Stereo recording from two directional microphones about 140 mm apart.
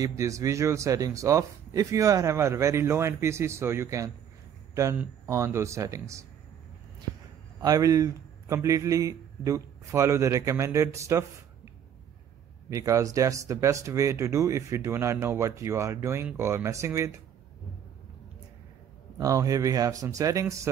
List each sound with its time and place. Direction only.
0.0 s speech: 20° right (ahead or behind)
7.6 s a man's voice: 25° right (ahead or behind)
19.1 s speech: 25° right (ahead or behind)